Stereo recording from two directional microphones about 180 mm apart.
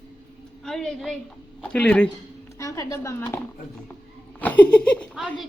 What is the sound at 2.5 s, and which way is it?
Speech, 15° left (ahead or behind).